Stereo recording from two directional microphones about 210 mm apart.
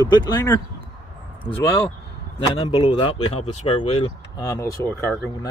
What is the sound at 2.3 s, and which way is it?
Speech, 20° left (ahead or behind).